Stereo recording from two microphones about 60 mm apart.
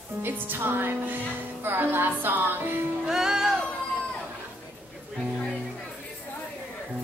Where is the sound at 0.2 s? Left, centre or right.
Right.